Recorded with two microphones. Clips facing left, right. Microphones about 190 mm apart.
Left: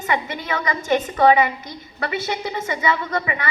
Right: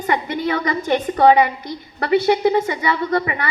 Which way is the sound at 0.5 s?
45° left (ahead or behind).